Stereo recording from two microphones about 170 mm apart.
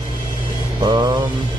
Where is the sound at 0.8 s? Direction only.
25° right (ahead or behind).